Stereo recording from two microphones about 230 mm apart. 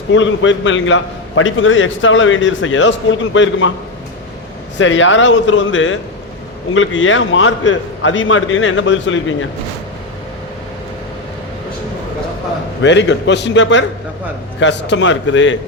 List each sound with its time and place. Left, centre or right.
0.1 s a man's voice: left
4.8 s a man's voice: left
12.8 s a man's voice: left